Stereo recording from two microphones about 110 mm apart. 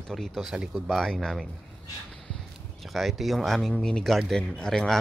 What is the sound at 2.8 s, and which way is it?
Speech, centre (ahead or behind).